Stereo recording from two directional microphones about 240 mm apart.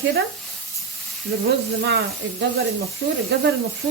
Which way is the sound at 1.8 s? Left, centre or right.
Right.